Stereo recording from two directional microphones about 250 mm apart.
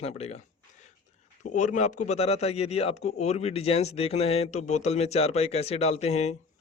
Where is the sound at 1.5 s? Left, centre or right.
Left.